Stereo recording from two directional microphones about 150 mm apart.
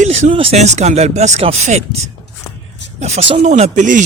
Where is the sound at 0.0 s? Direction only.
50° right (ahead or behind).